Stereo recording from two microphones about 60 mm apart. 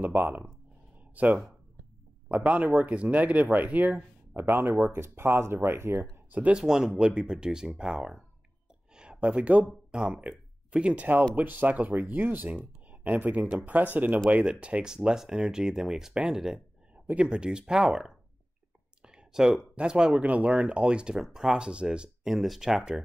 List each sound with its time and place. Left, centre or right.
0.0 s speech: right
6.5 s speech: centre
8.9 s a sound: centre
9.7 s speech: centre
10.2 s a sound: centre
11.3 s speech: right
14.4 s speech: centre
15.0 s speech: centre
16.5 s speech: right
19.0 s a sound: centre
19.7 s speech: centre
22.3 s speech: centre